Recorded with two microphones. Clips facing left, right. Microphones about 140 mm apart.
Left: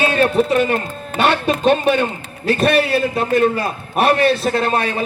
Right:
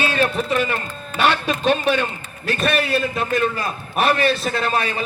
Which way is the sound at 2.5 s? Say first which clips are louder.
Left 5 dB; 30° left (ahead or behind).